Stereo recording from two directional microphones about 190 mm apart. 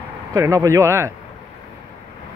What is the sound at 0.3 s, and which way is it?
Speech, 15° right (ahead or behind).